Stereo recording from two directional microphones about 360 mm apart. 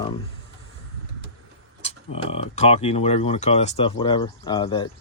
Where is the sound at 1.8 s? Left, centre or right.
Centre.